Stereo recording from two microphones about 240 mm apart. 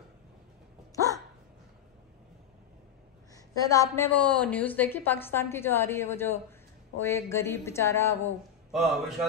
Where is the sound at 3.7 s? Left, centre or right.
Centre.